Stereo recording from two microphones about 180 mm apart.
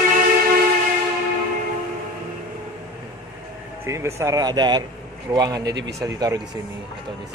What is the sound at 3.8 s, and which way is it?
Speech, 15° right (ahead or behind).